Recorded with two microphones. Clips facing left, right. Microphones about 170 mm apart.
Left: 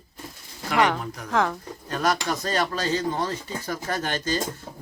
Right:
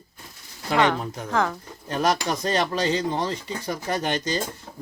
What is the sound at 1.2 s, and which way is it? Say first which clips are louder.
Speech: left 1 dB; centre (ahead or behind).